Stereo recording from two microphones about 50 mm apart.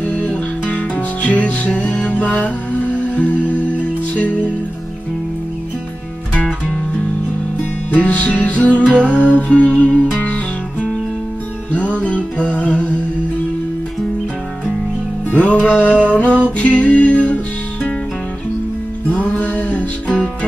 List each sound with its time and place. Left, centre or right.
0.0 s music: left
7.9 s music: left
11.7 s music: left
15.2 s music: left
19.0 s music: left